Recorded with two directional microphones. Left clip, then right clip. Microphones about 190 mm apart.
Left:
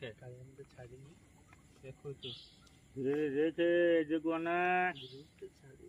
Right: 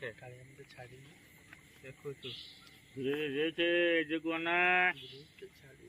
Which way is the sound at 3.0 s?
40° left (ahead or behind).